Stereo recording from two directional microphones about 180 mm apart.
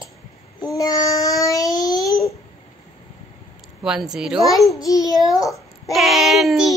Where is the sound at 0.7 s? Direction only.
20° left (ahead or behind).